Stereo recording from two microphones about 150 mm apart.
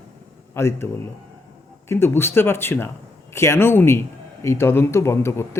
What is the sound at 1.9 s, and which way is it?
A man's voice, 15° left (ahead or behind).